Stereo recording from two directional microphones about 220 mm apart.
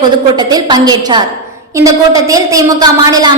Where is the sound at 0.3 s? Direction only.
20° right (ahead or behind).